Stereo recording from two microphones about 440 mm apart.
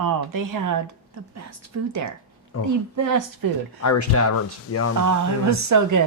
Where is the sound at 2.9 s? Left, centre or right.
Right.